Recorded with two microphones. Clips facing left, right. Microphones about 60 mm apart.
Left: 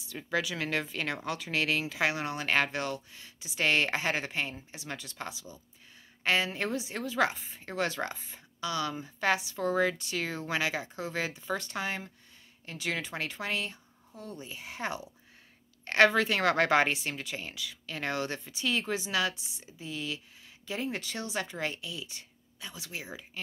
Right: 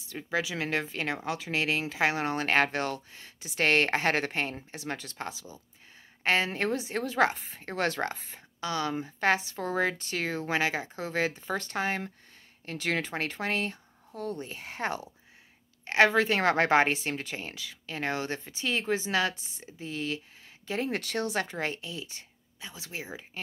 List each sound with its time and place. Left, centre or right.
0.0 s a woman's voice: right
15.8 s a woman's voice: right